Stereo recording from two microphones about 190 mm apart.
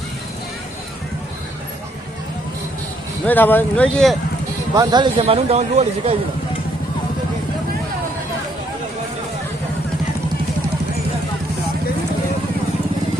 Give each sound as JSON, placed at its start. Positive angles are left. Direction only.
{"t": 3.2, "sound": "speech", "side_deg": 10}
{"t": 4.7, "sound": "speech", "side_deg": -20}